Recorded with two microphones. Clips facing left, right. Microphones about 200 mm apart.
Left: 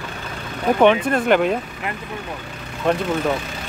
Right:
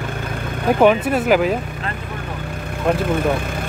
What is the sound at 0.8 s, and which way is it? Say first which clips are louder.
Speech: right 1 dB; 5° right (ahead or behind).